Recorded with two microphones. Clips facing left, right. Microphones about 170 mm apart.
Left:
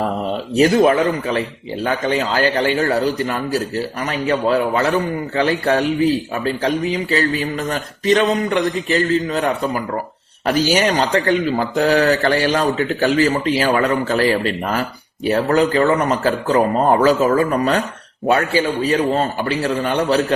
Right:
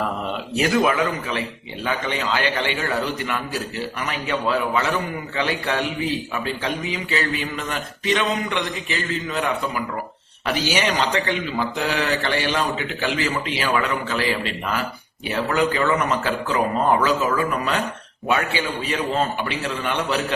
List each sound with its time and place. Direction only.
0.5 s speech: 30° left (ahead or behind)